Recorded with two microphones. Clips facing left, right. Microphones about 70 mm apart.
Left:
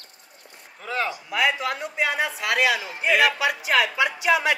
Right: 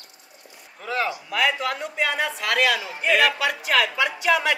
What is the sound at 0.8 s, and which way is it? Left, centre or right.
A man's voice, centre.